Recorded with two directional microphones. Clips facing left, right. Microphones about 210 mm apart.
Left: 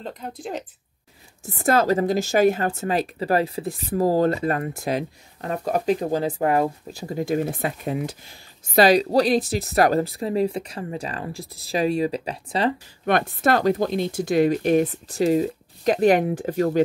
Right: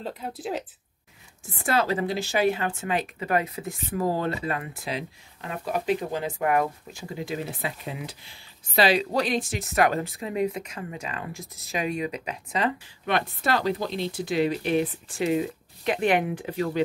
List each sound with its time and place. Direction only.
0.0 s speech: 5° right (ahead or behind)
1.4 s a woman's voice: 45° left (ahead or behind)
13.0 s speech: 50° left (ahead or behind)